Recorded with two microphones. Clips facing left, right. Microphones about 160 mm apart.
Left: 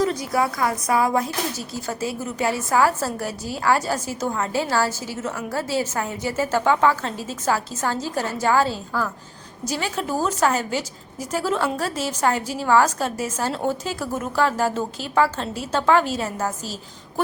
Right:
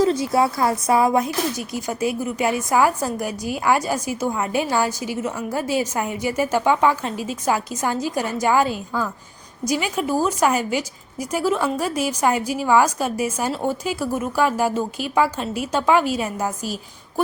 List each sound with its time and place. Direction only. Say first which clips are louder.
0.0 s a woman's voice: right 4 dB; 25° right (ahead or behind); by 16.7 s 10° right (ahead or behind)